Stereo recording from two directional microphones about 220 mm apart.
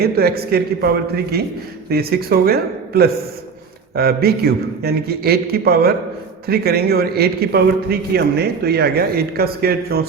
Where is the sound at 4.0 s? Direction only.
45° right (ahead or behind).